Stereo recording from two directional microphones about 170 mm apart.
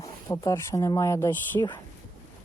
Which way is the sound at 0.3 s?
20° left (ahead or behind).